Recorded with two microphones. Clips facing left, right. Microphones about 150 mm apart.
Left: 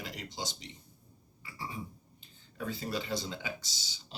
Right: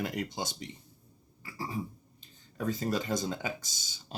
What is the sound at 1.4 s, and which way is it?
Cough, 40° right (ahead or behind).